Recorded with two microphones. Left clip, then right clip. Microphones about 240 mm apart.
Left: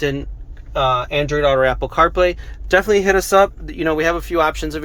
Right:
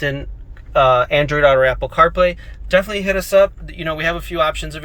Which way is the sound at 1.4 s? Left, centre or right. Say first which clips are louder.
Right 2 dB; centre.